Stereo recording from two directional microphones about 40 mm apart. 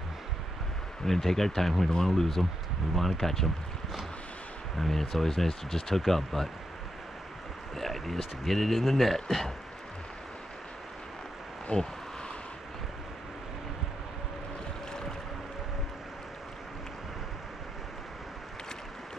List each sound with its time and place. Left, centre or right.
1.0 s speech: centre
4.7 s speech: centre
7.7 s speech: centre
11.7 s speech: left